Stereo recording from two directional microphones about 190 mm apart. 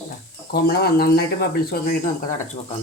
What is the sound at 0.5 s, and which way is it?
Speech, 55° left (ahead or behind).